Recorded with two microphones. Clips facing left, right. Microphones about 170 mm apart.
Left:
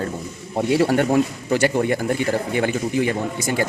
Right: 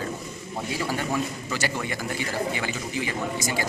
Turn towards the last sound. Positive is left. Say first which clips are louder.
# left 5 dB
turn(degrees=55)  # may be behind; listen again after turning